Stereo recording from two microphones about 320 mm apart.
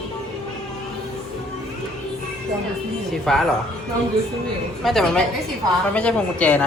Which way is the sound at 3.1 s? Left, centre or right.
Centre.